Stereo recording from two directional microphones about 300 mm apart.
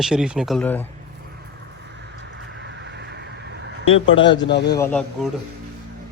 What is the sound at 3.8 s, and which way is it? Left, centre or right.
Speech, left.